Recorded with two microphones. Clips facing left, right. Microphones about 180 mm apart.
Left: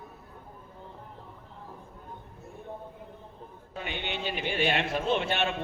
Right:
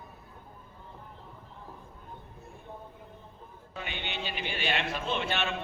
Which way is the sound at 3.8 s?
50° left (ahead or behind).